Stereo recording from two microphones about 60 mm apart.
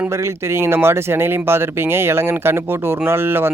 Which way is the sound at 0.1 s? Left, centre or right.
Right.